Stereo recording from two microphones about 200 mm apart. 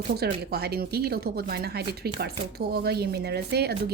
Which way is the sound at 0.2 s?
55° right (ahead or behind).